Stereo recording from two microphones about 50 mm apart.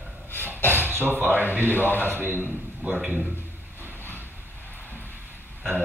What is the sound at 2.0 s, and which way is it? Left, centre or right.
Speech, right.